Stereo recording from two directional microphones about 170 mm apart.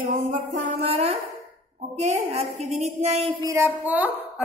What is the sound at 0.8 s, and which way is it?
A woman's voice, 35° right (ahead or behind).